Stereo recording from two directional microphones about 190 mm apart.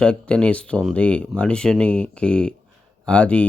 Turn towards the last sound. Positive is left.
turn(degrees=5)  # may be behind; listen again after turning